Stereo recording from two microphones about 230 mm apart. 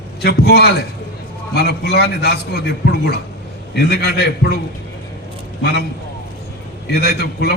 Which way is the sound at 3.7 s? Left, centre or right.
Left.